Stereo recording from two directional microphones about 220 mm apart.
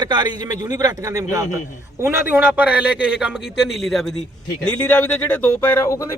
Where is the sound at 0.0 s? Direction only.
20° right (ahead or behind).